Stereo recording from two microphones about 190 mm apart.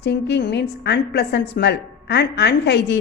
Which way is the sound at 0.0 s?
65° left (ahead or behind).